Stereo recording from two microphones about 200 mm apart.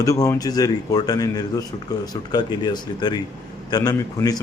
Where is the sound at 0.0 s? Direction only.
15° left (ahead or behind).